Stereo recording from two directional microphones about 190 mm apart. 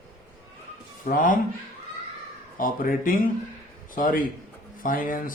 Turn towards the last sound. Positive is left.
turn(degrees=45)  # may be behind; listen again after turning